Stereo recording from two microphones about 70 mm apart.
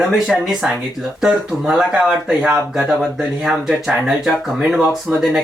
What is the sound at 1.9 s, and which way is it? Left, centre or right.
Speech, centre.